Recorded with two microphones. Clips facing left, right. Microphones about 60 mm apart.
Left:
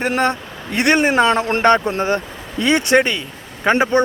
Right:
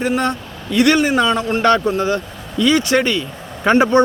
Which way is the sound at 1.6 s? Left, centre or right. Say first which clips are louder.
Even; left.